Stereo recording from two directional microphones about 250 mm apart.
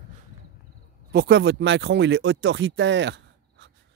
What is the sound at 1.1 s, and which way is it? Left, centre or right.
Speech, right.